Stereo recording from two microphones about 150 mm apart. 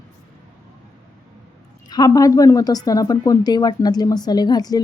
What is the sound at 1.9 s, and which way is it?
A woman's voice, 25° left (ahead or behind).